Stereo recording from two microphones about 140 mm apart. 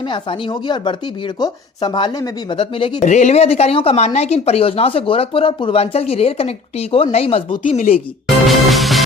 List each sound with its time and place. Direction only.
0.0 s speech: 35° left (ahead or behind)
3.0 s speech: 55° left (ahead or behind)
7.8 s speech: 75° left (ahead or behind)
8.4 s music: centre (ahead or behind)